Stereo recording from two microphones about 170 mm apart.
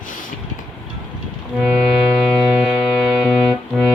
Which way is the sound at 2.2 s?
Centre (ahead or behind).